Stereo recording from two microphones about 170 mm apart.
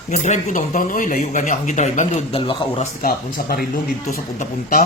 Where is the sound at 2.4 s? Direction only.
30° left (ahead or behind).